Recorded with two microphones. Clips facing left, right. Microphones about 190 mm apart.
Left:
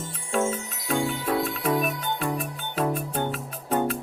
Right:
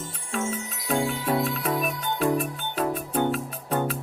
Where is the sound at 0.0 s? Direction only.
Centre (ahead or behind).